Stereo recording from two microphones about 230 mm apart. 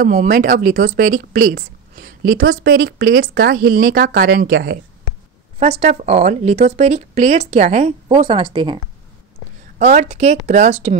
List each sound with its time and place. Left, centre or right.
0.0 s speech: right
5.6 s speech: right
9.8 s speech: right